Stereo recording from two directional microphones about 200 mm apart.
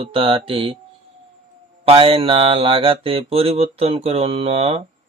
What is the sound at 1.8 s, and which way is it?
Speech, 30° right (ahead or behind).